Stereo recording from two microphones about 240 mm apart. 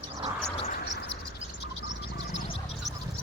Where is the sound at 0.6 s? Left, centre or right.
Left.